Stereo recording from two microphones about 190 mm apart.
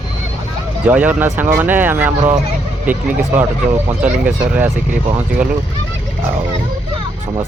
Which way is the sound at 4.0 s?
10° right (ahead or behind).